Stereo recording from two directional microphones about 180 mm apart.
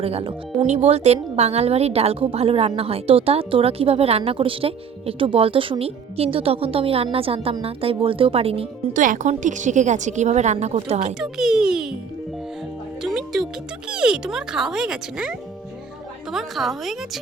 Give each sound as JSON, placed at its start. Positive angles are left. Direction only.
{"t": 0.0, "sound": "speech", "side_deg": -30}
{"t": 9.0, "sound": "speech", "side_deg": -45}
{"t": 11.2, "sound": "speech", "side_deg": 0}
{"t": 13.0, "sound": "speech", "side_deg": 0}